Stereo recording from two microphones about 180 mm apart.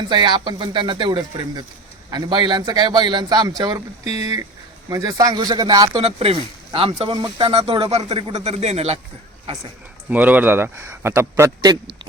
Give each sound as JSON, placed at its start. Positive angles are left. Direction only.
{"t": 0.1, "sound": "speech", "side_deg": -25}
{"t": 10.1, "sound": "speech", "side_deg": -10}